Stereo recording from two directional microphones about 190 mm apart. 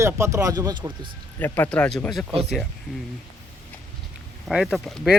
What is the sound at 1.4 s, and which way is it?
Speech, 10° left (ahead or behind).